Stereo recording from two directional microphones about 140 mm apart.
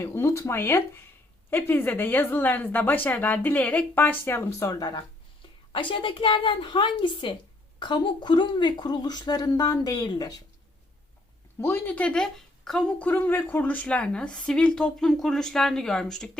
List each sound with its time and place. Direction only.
0.0 s speech: 20° left (ahead or behind)
11.6 s speech: 15° left (ahead or behind)